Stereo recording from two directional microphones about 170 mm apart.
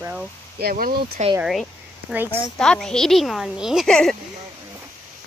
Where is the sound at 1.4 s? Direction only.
Centre (ahead or behind).